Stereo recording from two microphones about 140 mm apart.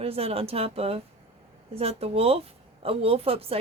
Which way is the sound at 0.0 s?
45° right (ahead or behind).